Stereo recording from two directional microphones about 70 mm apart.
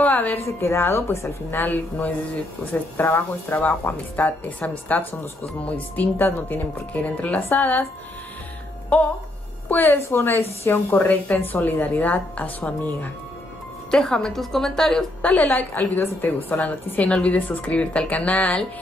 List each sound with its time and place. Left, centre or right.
0.0 s a sound: left
0.5 s speech: left
1.5 s a woman's voice: left
3.6 s a woman's voice: left
9.7 s a woman's voice: left
13.8 s speech: centre
15.2 s a woman's voice: left